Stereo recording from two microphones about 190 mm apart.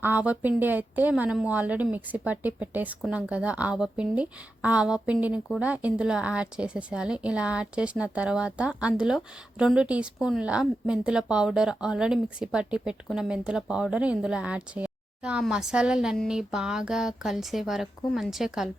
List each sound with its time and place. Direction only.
0.0 s a woman's voice: 10° right (ahead or behind)